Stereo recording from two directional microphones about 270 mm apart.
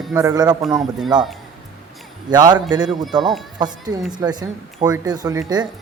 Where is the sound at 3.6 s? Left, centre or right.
Centre.